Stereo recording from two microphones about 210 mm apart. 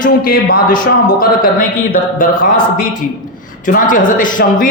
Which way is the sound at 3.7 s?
40° left (ahead or behind).